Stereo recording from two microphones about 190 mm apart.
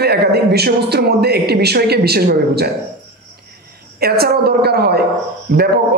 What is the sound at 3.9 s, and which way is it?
A man's voice, 55° right (ahead or behind).